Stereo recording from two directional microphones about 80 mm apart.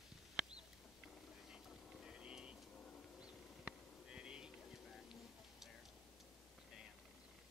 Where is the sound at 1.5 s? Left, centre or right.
Centre.